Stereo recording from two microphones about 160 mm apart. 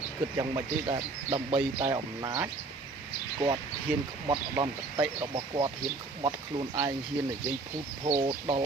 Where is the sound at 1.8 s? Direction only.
25° right (ahead or behind).